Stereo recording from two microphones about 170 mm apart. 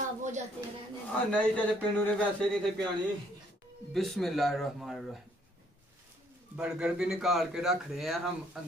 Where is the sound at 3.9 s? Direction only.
Centre (ahead or behind).